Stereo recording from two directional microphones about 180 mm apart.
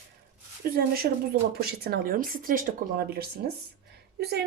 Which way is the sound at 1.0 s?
45° right (ahead or behind).